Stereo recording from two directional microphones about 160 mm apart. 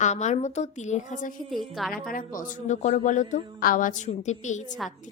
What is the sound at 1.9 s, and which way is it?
A woman's voice, 60° left (ahead or behind).